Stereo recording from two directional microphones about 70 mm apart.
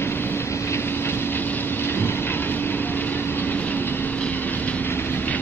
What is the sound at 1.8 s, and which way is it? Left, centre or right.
Train, left.